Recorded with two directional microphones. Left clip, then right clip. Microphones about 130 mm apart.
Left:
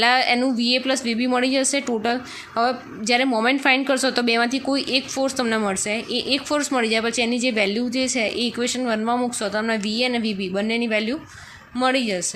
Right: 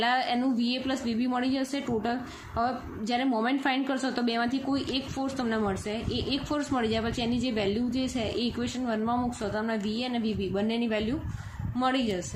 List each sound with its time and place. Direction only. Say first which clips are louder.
0.0 s a woman's voice: left 9 dB; 25° left (ahead or behind)